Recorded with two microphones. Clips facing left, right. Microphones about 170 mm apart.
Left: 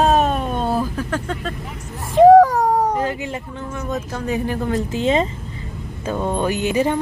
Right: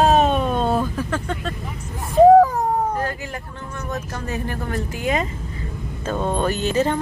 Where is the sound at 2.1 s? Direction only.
90° left.